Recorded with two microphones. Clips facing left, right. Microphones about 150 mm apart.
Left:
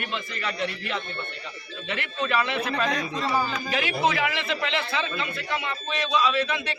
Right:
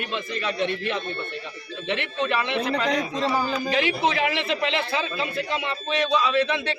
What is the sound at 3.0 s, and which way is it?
A man's voice, 35° right (ahead or behind).